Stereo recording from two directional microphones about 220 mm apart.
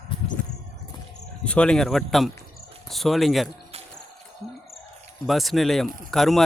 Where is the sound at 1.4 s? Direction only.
5° left (ahead or behind).